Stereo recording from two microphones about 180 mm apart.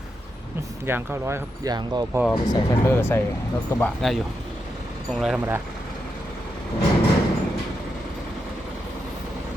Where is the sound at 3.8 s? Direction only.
Centre (ahead or behind).